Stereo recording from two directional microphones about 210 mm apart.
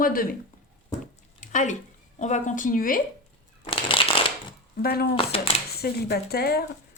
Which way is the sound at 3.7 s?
25° left (ahead or behind).